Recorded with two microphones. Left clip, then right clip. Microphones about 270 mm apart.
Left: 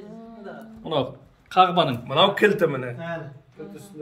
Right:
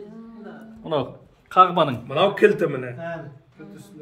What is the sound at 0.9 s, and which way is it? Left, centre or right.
A man's voice, centre.